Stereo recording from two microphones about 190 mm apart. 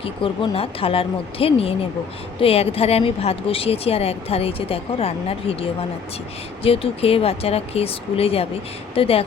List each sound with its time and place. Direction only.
0.0 s a woman's voice: 30° left (ahead or behind)